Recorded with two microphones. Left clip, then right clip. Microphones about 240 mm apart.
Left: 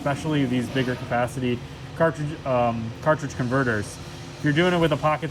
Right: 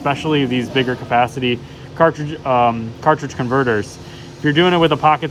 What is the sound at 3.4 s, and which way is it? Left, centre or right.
Speech, right.